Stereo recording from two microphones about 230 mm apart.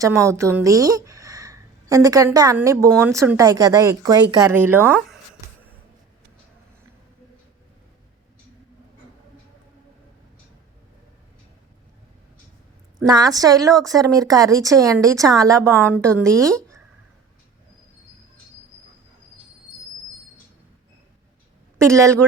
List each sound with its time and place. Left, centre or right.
0.0 s speech: centre
13.1 s speech: centre
21.8 s a woman's voice: centre